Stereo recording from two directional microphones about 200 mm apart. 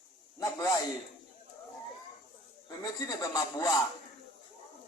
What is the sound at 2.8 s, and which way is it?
Speech, 20° left (ahead or behind).